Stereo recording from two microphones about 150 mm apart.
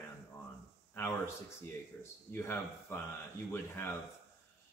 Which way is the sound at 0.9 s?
15° left (ahead or behind).